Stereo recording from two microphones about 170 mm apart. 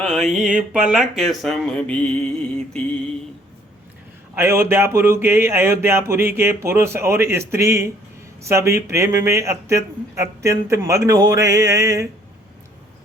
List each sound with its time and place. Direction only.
0.0 s mantra: centre (ahead or behind)
0.3 s a sound: 5° right (ahead or behind)
4.4 s speech: 15° right (ahead or behind)